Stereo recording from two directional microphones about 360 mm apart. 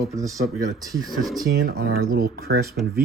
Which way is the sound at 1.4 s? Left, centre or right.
Right.